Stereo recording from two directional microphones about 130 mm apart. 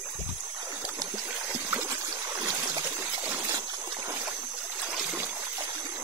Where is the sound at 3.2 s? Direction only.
10° right (ahead or behind).